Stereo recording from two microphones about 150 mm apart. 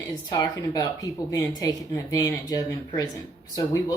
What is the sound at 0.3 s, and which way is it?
A woman's voice, 25° left (ahead or behind).